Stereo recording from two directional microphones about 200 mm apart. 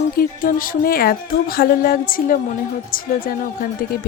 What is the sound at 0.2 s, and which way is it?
A woman's voice, 45° left (ahead or behind).